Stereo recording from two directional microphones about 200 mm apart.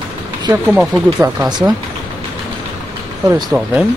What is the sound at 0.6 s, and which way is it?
Speech, 5° right (ahead or behind).